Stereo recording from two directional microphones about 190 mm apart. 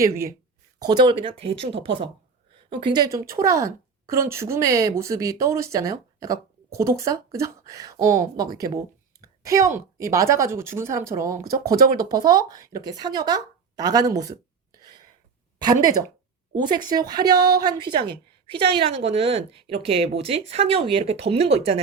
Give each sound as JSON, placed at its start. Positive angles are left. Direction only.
{"t": 0.0, "sound": "a woman's voice", "side_deg": -15}
{"t": 17.8, "sound": "a woman's voice", "side_deg": -60}
{"t": 18.8, "sound": "speech", "side_deg": -35}